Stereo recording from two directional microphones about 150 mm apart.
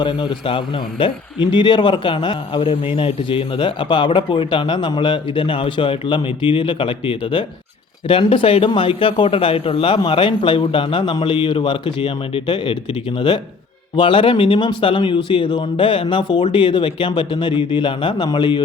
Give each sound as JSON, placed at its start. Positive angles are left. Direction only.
{"t": 0.0, "sound": "a man's voice", "side_deg": 30}